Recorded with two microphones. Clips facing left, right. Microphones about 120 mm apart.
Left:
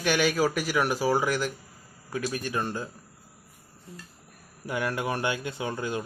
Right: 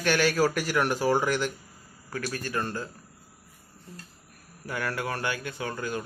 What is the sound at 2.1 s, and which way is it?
Speech, 15° left (ahead or behind).